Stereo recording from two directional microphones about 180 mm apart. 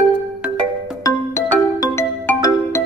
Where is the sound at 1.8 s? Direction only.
15° left (ahead or behind).